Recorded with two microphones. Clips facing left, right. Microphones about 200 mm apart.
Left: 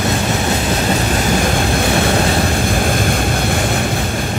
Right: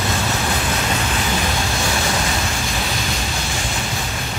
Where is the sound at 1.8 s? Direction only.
60° left (ahead or behind).